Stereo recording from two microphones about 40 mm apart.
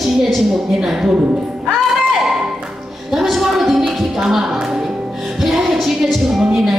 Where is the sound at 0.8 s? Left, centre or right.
Centre.